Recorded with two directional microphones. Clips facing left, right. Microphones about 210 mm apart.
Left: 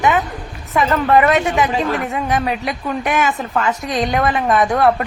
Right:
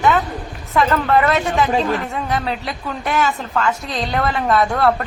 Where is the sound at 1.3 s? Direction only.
20° left (ahead or behind).